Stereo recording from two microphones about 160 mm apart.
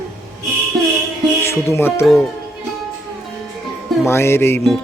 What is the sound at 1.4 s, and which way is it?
Music, 15° left (ahead or behind).